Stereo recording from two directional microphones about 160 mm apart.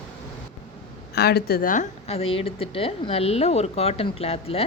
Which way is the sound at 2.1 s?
40° left (ahead or behind).